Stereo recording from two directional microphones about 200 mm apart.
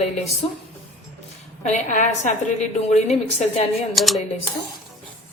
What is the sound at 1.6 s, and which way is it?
A woman's voice, 35° left (ahead or behind).